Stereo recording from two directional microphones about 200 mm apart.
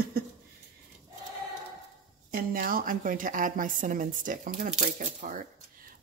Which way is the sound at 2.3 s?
45° right (ahead or behind).